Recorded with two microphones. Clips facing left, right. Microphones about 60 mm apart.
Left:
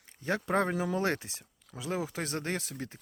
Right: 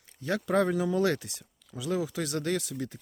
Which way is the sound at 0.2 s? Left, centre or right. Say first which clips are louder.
Right 3 dB; left.